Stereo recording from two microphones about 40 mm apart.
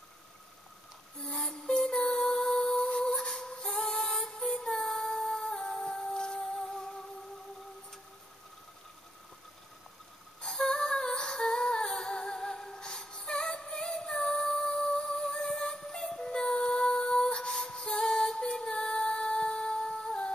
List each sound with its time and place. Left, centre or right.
1.3 s music: centre
10.4 s humming: centre